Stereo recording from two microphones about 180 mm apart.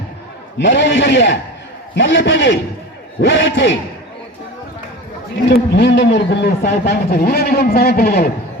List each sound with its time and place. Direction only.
0.6 s a man's voice: 85° left
5.5 s a man's voice: 75° left (ahead or behind)